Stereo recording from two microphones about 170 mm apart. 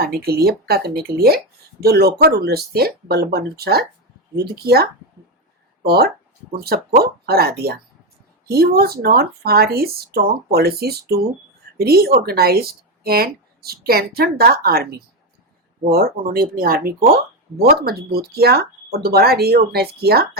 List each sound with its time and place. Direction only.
0.0 s speech: 65° right (ahead or behind)